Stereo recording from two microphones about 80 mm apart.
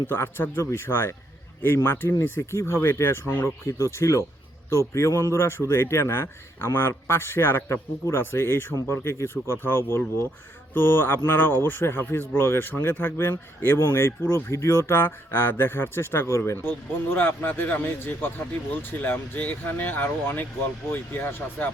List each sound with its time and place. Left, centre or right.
0.1 s a man's voice: left